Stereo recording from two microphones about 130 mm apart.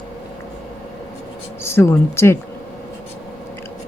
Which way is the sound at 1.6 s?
20° left (ahead or behind).